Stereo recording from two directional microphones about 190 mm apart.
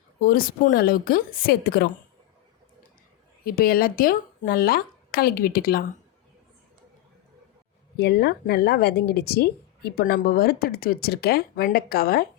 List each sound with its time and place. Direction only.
0.2 s a woman's voice: 50° left (ahead or behind)
3.4 s a woman's voice: 50° left (ahead or behind)
7.9 s speech: 60° left (ahead or behind)